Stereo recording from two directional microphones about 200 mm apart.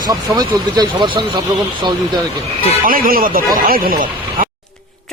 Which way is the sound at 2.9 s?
45° right (ahead or behind).